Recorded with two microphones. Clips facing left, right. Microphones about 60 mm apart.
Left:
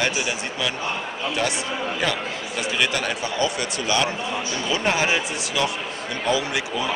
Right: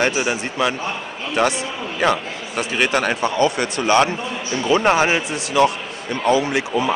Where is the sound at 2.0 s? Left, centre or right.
Right.